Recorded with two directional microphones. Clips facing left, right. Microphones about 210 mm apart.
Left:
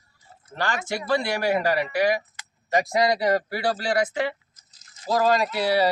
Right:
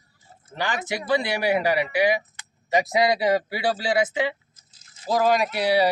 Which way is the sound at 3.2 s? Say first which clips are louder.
Right 1 dB; 5° right (ahead or behind).